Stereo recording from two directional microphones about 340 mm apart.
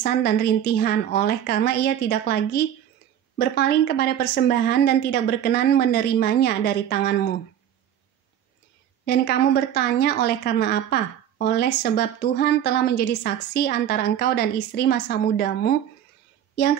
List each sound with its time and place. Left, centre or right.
0.0 s a woman's voice: left
9.0 s a woman's voice: left